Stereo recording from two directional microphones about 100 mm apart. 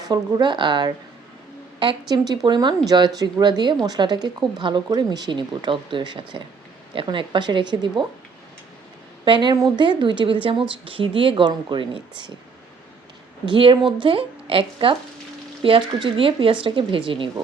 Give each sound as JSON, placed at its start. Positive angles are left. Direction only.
{"t": 0.0, "sound": "speech", "side_deg": -40}
{"t": 9.2, "sound": "speech", "side_deg": -50}
{"t": 13.4, "sound": "speech", "side_deg": -60}